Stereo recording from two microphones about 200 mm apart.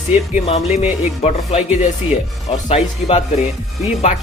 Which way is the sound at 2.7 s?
30° left (ahead or behind).